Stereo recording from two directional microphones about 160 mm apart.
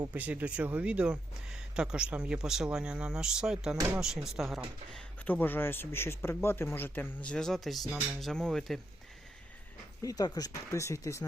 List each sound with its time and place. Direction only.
0.1 s speech: 10° right (ahead or behind)
10.0 s speech: 20° left (ahead or behind)